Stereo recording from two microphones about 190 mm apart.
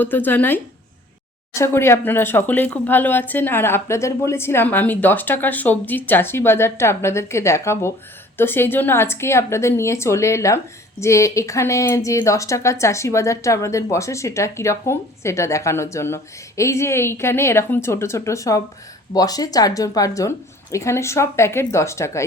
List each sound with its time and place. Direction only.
0.0 s speech: 10° left (ahead or behind)